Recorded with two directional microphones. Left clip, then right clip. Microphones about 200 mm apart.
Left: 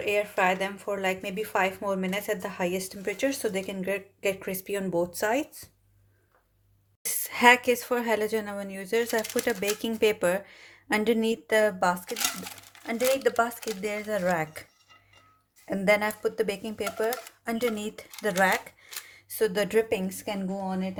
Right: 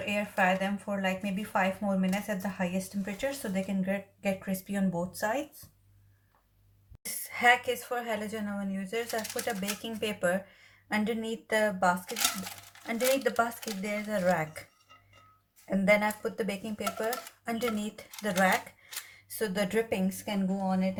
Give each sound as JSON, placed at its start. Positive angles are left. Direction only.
{"t": 0.0, "sound": "a woman's voice", "side_deg": 45}
{"t": 7.3, "sound": "a woman's voice", "side_deg": 45}